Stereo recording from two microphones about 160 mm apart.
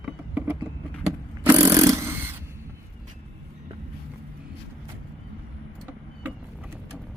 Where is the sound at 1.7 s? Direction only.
20° right (ahead or behind).